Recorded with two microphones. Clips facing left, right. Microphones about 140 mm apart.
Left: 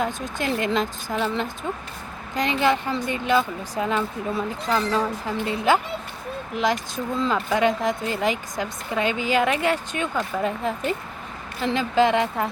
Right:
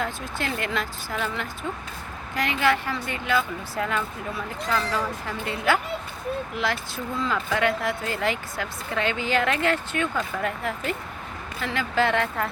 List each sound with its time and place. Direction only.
0.0 s a woman's voice: 15° left (ahead or behind)